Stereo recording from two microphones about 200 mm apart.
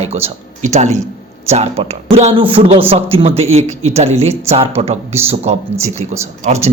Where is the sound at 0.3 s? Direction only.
35° right (ahead or behind).